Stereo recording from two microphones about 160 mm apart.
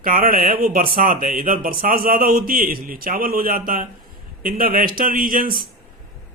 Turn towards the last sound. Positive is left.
turn(degrees=-60)  # may be behind; listen again after turning